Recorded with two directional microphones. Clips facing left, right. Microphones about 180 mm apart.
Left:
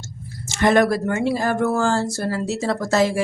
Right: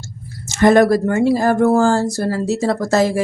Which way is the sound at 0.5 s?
40° right (ahead or behind).